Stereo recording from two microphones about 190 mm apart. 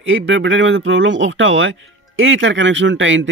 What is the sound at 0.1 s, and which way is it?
Speech, 80° right.